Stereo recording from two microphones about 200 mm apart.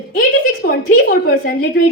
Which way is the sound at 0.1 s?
50° left (ahead or behind).